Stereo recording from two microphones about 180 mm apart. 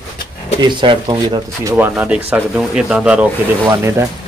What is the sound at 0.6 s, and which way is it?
Speech, 25° right (ahead or behind).